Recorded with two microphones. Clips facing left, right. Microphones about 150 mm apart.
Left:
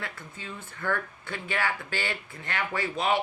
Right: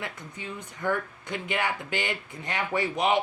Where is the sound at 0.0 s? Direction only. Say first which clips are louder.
Right 2 dB; 15° right (ahead or behind).